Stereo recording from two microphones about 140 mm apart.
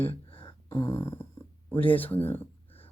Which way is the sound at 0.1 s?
40° left (ahead or behind).